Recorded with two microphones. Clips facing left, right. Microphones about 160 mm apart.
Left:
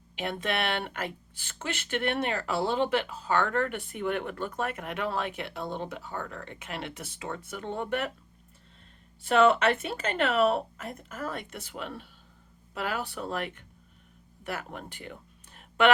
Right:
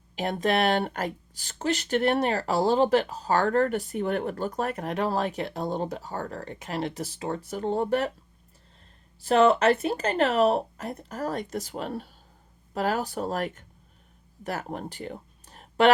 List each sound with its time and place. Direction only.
0.2 s speech: 40° right (ahead or behind)
9.2 s speech: 35° right (ahead or behind)